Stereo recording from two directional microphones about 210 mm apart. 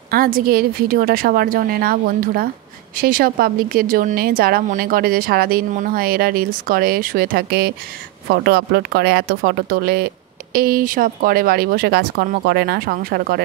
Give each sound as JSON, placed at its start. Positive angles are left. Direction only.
{"t": 0.1, "sound": "speech", "side_deg": -45}